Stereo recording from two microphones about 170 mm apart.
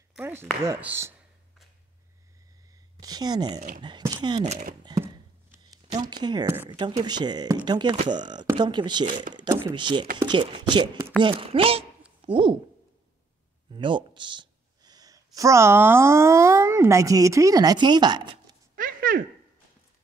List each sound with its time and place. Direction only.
0.2 s speech: 15° right (ahead or behind)
3.0 s speech: 25° right (ahead or behind)
4.4 s speech: 40° right (ahead or behind)
4.8 s a sound: 15° right (ahead or behind)
6.2 s speech: 25° right (ahead or behind)
13.7 s speech: 30° right (ahead or behind)
18.8 s a sound: 55° right (ahead or behind)